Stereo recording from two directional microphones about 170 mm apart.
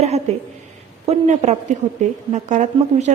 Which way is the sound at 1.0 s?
40° right (ahead or behind).